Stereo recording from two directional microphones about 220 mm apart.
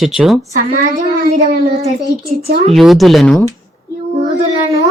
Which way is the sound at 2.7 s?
Centre (ahead or behind).